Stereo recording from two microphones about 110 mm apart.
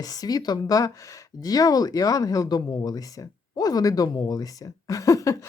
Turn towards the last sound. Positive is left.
turn(degrees=30)  # may be behind; listen again after turning